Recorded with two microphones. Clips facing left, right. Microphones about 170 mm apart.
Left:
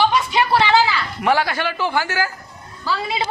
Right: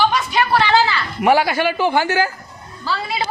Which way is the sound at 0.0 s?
20° left (ahead or behind).